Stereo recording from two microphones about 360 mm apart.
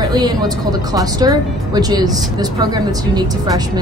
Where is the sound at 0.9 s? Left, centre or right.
Centre.